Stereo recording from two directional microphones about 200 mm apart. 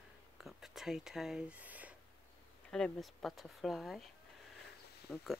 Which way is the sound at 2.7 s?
5° left (ahead or behind).